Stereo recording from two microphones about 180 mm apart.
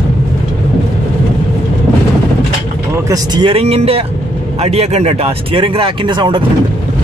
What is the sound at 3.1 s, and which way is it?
Speech, 25° right (ahead or behind).